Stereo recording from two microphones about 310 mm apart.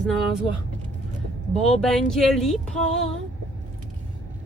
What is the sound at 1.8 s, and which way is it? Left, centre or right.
Speech, centre.